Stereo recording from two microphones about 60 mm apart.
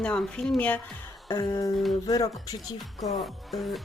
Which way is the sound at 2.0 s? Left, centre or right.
Left.